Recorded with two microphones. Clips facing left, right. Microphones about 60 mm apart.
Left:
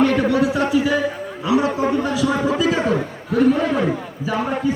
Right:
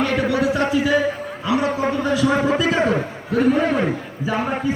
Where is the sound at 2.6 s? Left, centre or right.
Centre.